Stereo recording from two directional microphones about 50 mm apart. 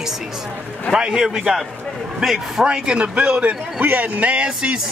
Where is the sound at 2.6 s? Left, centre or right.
Centre.